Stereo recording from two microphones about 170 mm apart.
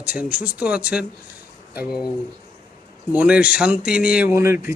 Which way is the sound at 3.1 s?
10° right (ahead or behind).